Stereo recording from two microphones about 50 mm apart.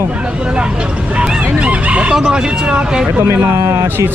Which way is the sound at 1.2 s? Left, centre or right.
Right.